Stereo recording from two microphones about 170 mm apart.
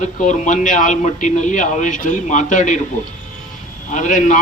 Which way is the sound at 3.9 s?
50° left (ahead or behind).